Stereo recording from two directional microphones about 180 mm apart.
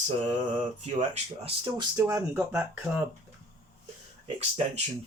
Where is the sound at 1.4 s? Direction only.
20° right (ahead or behind).